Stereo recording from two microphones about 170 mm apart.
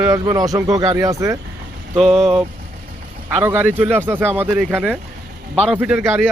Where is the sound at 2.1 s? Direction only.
Centre (ahead or behind).